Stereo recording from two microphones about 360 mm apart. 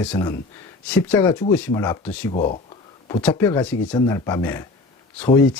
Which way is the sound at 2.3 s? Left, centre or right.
Centre.